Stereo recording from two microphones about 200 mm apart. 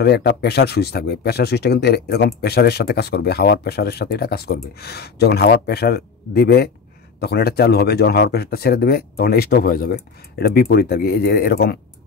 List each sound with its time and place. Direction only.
0.0 s speech: 55° left (ahead or behind)